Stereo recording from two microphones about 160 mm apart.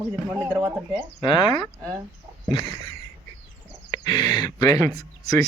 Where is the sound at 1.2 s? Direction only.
30° left (ahead or behind).